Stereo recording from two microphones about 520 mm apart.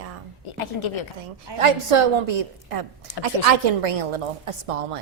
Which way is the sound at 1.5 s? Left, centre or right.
Right.